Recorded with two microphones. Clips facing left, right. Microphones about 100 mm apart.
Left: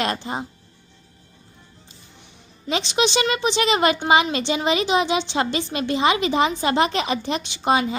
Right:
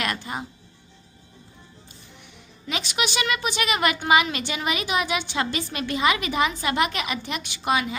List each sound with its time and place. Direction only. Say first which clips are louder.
0.0 s speech: left 4 dB; 25° left (ahead or behind)
2.6 s speech: left 6 dB; 30° left (ahead or behind)